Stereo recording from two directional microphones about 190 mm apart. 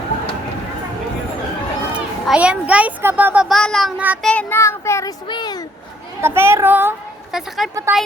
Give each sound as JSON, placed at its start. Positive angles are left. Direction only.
{"t": 1.9, "sound": "a child's voice", "side_deg": -5}
{"t": 4.3, "sound": "a child's voice", "side_deg": 10}
{"t": 6.2, "sound": "a child's voice", "side_deg": -15}
{"t": 7.3, "sound": "a woman's voice", "side_deg": 0}
{"t": 7.9, "sound": "a child's voice", "side_deg": -10}